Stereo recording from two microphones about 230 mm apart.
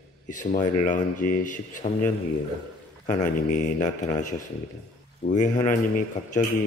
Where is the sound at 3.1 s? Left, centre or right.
Left.